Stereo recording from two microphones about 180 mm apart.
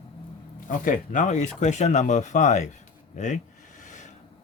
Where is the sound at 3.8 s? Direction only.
45° left (ahead or behind).